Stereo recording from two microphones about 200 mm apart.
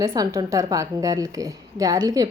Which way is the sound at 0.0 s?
20° right (ahead or behind).